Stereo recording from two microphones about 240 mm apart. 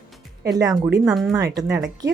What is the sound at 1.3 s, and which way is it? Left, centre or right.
Speech, centre.